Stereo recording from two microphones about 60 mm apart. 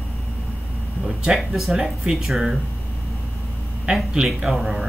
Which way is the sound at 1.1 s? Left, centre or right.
Centre.